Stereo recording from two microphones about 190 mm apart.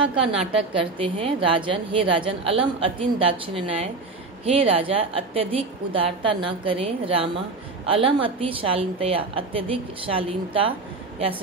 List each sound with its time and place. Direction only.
0.1 s a woman's voice: 30° right (ahead or behind)